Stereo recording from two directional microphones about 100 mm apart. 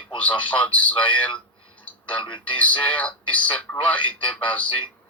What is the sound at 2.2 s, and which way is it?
Speech, 55° left (ahead or behind).